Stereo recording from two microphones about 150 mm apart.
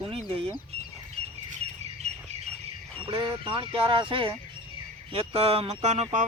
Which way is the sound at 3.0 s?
35° right (ahead or behind).